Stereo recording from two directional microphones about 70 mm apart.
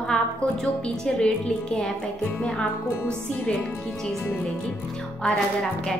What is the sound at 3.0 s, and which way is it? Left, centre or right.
Music, centre.